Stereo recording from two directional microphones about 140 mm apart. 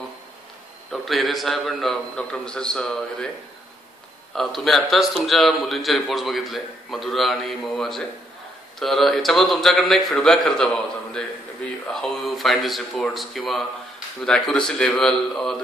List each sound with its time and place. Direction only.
0.9 s a man's voice: centre (ahead or behind)
4.4 s a man's voice: centre (ahead or behind)